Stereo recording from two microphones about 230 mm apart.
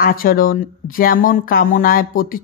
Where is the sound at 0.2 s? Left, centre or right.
Left.